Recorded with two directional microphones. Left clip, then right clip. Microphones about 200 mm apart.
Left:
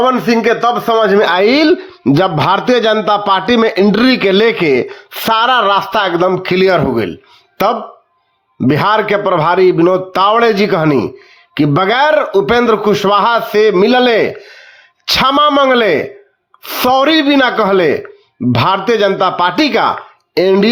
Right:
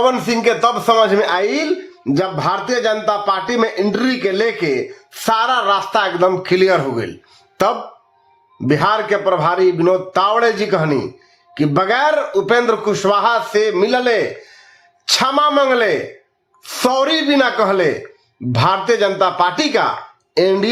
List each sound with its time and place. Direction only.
0.0 s a man's voice: 20° left (ahead or behind)